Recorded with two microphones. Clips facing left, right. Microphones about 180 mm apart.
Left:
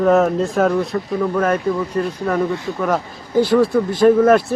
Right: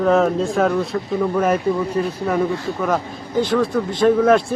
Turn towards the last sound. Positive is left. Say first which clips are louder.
# left 2 dB
turn(degrees=5)  # may be behind; listen again after turning